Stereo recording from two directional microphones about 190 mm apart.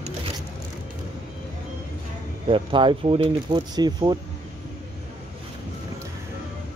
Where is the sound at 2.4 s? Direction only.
25° right (ahead or behind).